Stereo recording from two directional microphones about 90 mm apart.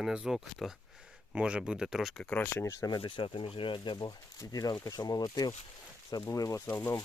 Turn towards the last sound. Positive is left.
turn(degrees=40)  # may be behind; listen again after turning